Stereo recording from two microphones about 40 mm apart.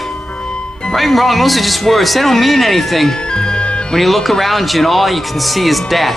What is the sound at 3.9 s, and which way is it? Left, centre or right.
Speech, centre.